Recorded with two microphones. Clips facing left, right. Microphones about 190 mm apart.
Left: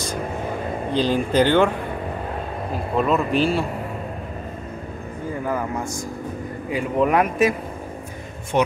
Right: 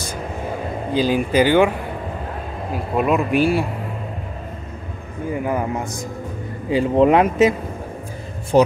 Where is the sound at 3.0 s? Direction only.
10° right (ahead or behind).